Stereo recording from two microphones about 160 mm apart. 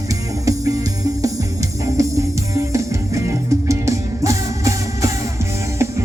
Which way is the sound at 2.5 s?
20° right (ahead or behind).